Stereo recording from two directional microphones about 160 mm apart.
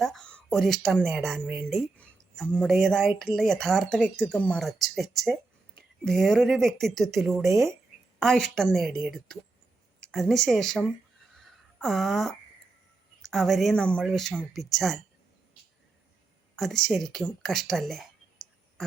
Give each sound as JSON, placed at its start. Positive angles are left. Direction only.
{"t": 0.0, "sound": "speech", "side_deg": 5}
{"t": 1.5, "sound": "speech", "side_deg": -10}
{"t": 2.0, "sound": "speech", "side_deg": 5}
{"t": 11.3, "sound": "a sound", "side_deg": 0}
{"t": 13.2, "sound": "speech", "side_deg": 0}
{"t": 16.6, "sound": "speech", "side_deg": 0}